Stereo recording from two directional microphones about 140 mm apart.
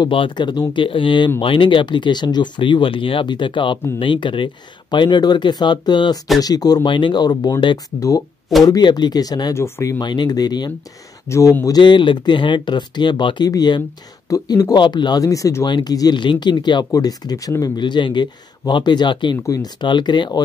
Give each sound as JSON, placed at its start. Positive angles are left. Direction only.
{"t": 0.0, "sound": "speech", "side_deg": 35}